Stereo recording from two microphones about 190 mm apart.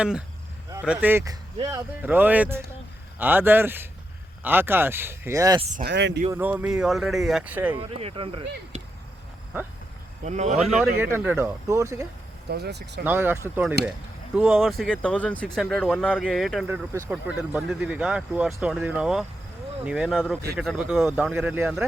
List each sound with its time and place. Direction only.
0.0 s speech: 5° right (ahead or behind)
5.7 s speech: 60° right (ahead or behind)
6.3 s speech: 10° right (ahead or behind)
7.8 s speech: 30° right (ahead or behind)
10.2 s speech: 35° right (ahead or behind)
11.0 s speech: 10° right (ahead or behind)
12.5 s speech: 60° right (ahead or behind)
13.1 s speech: 10° right (ahead or behind)
13.8 s speech: 55° right (ahead or behind)
14.3 s speech: 10° right (ahead or behind)
14.6 s speech: centre (ahead or behind)
16.6 s speech: 10° right (ahead or behind)